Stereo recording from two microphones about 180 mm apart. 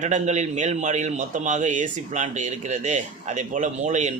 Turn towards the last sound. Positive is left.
turn(degrees=-40)  # may be behind; listen again after turning